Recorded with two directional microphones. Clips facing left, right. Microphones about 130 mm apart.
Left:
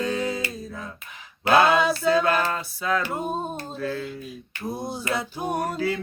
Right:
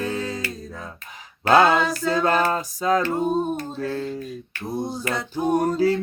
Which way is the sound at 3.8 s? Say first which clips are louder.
Right 3 dB; 40° right (ahead or behind).